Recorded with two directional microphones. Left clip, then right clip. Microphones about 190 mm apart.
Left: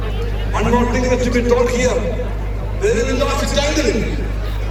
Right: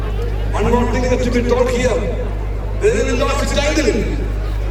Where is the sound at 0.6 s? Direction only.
10° left (ahead or behind).